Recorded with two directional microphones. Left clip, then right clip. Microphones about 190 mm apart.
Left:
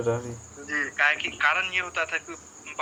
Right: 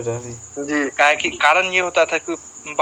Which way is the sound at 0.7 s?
55° right (ahead or behind).